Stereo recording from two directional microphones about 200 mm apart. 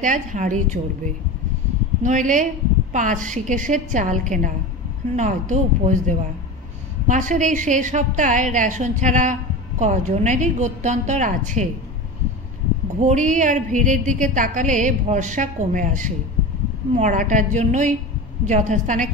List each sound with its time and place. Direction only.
0.0 s a woman's voice: 40° right (ahead or behind)
13.0 s a woman's voice: 40° right (ahead or behind)